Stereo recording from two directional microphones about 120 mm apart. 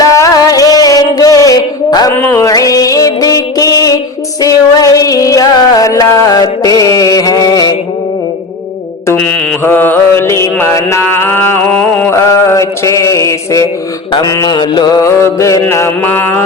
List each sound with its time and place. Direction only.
0.0 s music: 30° left (ahead or behind)
2.1 s music: 20° left (ahead or behind)
9.1 s mantra: 15° left (ahead or behind)